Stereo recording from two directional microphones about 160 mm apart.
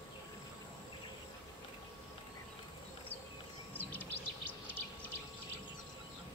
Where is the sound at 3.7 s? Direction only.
10° left (ahead or behind).